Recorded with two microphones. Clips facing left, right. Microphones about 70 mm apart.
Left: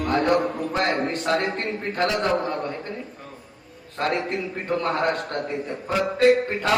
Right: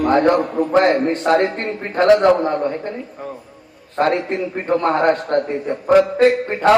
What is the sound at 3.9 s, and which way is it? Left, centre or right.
A man's voice, right.